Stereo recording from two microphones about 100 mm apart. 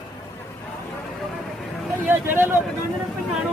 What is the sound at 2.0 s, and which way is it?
Speech, 20° right (ahead or behind).